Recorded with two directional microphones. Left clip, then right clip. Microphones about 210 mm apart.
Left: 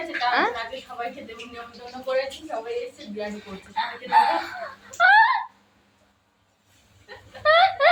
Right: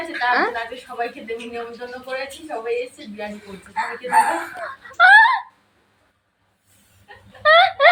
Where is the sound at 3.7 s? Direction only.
20° right (ahead or behind).